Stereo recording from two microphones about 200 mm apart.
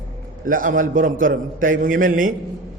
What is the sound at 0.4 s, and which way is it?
A man's voice, 45° right (ahead or behind).